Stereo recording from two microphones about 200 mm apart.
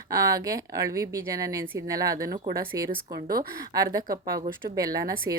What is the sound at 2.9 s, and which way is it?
Speech, 45° right (ahead or behind).